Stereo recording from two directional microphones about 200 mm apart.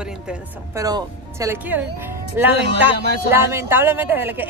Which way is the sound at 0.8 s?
15° right (ahead or behind).